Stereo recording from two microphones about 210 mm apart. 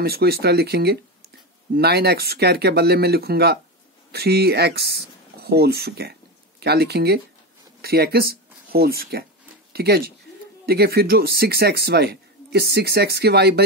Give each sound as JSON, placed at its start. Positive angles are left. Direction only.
{"t": 0.0, "sound": "speech", "side_deg": -50}